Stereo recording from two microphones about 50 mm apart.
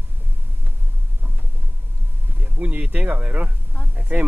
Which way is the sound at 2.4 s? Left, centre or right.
Right.